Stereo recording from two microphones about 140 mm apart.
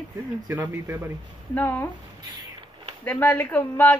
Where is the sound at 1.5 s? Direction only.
15° left (ahead or behind).